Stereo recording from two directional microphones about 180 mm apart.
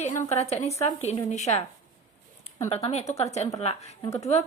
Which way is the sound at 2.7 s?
35° left (ahead or behind).